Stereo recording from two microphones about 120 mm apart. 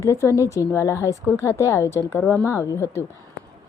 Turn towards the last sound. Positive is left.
turn(degrees=20)  # may be behind; listen again after turning